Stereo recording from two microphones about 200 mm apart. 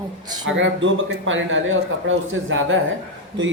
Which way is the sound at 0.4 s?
70° right (ahead or behind).